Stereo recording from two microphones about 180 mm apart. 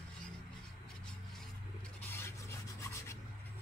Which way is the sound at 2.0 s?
15° left (ahead or behind).